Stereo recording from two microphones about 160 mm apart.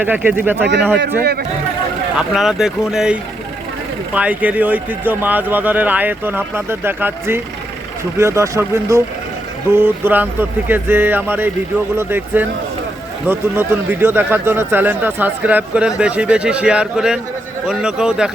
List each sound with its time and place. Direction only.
0.0 s speech: 10° right (ahead or behind)
1.2 s a man's voice: 90° right
2.1 s speech: 5° right (ahead or behind)